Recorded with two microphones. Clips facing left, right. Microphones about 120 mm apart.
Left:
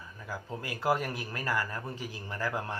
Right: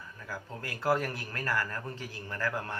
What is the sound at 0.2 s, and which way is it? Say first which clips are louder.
Speech: left 2 dB; 15° left (ahead or behind).